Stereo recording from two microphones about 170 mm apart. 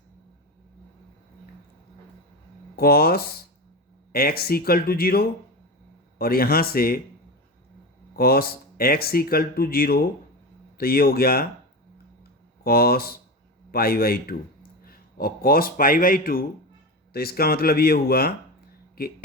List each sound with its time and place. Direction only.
2.7 s speech: 65° left (ahead or behind)
8.1 s speech: 65° left (ahead or behind)
12.6 s speech: 65° left (ahead or behind)